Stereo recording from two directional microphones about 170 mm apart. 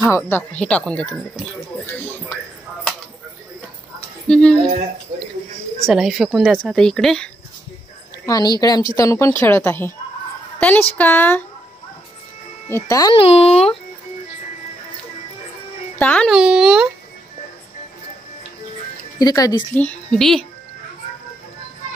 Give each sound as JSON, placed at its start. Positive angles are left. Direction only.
{"t": 0.0, "sound": "speech", "side_deg": 10}
{"t": 1.9, "sound": "music", "side_deg": 10}
{"t": 4.3, "sound": "a woman's voice", "side_deg": 5}
{"t": 5.9, "sound": "a woman's voice", "side_deg": 0}
{"t": 8.3, "sound": "a woman's voice", "side_deg": 20}
{"t": 12.6, "sound": "a woman's voice", "side_deg": 15}
{"t": 13.1, "sound": "speech", "side_deg": 35}
{"t": 16.0, "sound": "a woman's voice", "side_deg": 5}
{"t": 19.1, "sound": "a woman's voice", "side_deg": 20}
{"t": 19.7, "sound": "a woman's voice", "side_deg": 5}